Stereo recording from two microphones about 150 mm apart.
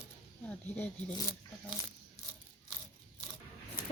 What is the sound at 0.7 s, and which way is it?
Speech, 10° left (ahead or behind).